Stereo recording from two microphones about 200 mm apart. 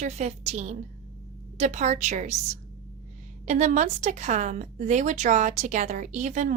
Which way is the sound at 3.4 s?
35° right (ahead or behind).